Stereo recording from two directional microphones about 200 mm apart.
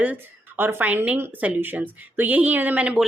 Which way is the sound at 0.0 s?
10° right (ahead or behind).